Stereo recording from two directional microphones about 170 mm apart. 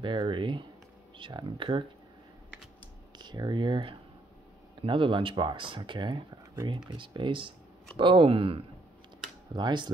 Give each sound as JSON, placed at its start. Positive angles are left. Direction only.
{"t": 0.0, "sound": "speech", "side_deg": -30}
{"t": 3.2, "sound": "speech", "side_deg": -25}